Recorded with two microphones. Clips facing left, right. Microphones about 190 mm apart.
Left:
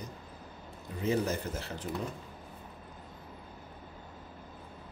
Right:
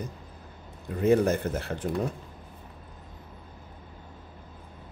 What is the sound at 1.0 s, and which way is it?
Speech, 55° right (ahead or behind).